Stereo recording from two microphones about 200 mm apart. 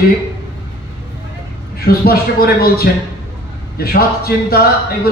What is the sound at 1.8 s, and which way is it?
A man's voice, 50° left (ahead or behind).